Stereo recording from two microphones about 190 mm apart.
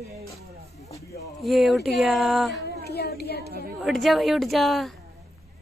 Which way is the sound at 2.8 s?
55° left (ahead or behind).